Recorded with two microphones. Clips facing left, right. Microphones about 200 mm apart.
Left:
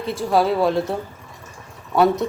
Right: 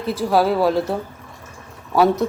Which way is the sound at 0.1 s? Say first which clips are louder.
Right 1 dB; centre (ahead or behind).